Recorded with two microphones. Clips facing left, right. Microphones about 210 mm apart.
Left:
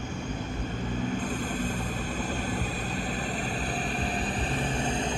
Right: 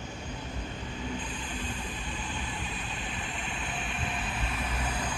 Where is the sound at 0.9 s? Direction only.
45° left (ahead or behind); by 5.2 s 25° left (ahead or behind).